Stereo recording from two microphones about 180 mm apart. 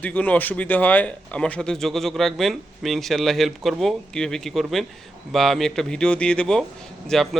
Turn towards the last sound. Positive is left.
turn(degrees=0)  # may be behind; listen again after turning